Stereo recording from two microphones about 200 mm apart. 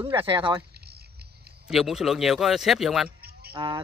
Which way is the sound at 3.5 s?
25° right (ahead or behind).